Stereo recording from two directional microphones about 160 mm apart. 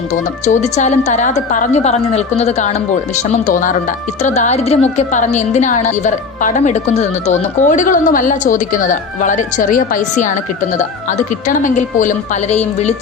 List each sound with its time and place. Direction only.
0.1 s a woman's voice: 50° left (ahead or behind)